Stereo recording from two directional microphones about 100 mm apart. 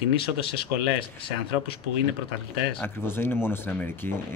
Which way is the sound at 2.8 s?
25° left (ahead or behind).